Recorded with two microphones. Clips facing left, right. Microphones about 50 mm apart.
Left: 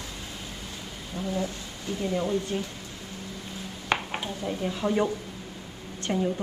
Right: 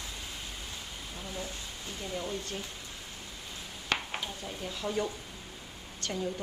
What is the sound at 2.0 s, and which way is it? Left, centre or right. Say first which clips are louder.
Speech: left 9 dB; left.